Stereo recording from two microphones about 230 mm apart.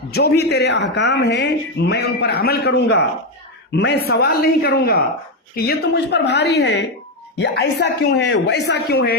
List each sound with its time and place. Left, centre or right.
0.1 s a man's voice: left